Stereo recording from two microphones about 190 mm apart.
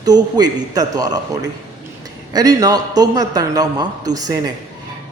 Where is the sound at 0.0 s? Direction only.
20° right (ahead or behind).